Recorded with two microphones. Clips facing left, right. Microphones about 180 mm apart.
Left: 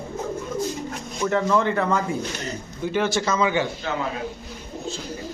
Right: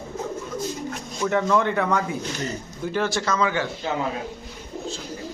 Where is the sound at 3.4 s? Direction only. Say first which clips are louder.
Left 2 dB; 20° left (ahead or behind).